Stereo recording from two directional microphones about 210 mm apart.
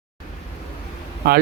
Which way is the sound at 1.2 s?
45° right (ahead or behind).